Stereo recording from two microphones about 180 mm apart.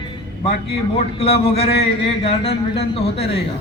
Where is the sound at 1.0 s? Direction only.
35° left (ahead or behind).